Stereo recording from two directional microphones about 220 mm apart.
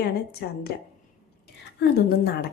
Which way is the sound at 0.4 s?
45° left (ahead or behind).